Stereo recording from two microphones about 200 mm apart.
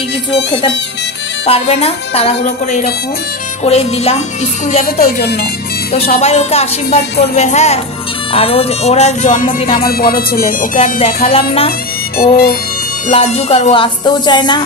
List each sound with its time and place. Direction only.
0.5 s speech: 20° left (ahead or behind)
1.4 s music: 30° left (ahead or behind)
4.8 s speech: 50° left (ahead or behind)
5.9 s music: 30° left (ahead or behind)
11.2 s speech: 30° left (ahead or behind)
12.2 s music: 50° left (ahead or behind)
13.1 s speech: 30° left (ahead or behind)